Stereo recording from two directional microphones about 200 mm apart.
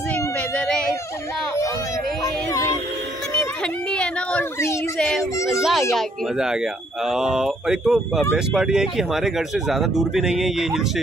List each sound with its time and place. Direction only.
0.1 s cat: 5° left (ahead or behind)
2.5 s music: 15° left (ahead or behind)
3.9 s a sound: 5° left (ahead or behind)
5.9 s speech: 5° right (ahead or behind)